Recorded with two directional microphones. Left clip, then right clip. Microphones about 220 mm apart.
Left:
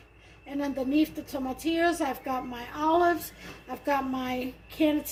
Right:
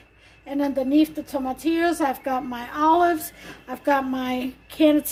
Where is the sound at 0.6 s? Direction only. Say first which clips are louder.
Right 7 dB; 50° right (ahead or behind).